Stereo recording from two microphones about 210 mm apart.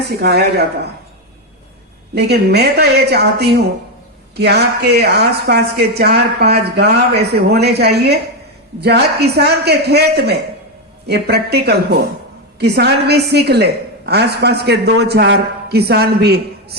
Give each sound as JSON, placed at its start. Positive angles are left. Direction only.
{"t": 0.2, "sound": "a woman's voice", "side_deg": -50}
{"t": 2.1, "sound": "a woman's voice", "side_deg": -50}